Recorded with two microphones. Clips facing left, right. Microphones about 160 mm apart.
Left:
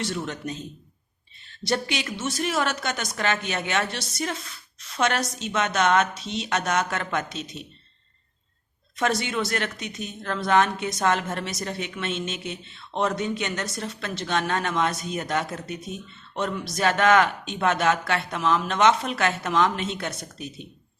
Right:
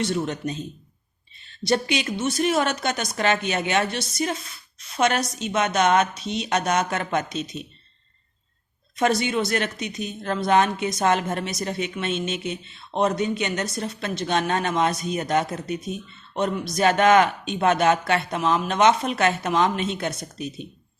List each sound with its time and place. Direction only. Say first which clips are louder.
0.0 s speech: right 5 dB; 20° right (ahead or behind)
1.6 s a woman's voice: right 4 dB; 20° right (ahead or behind)
9.0 s speech: right 3 dB; 20° right (ahead or behind)